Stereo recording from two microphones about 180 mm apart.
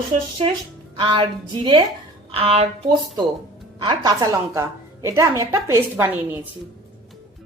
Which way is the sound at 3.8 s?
25° right (ahead or behind).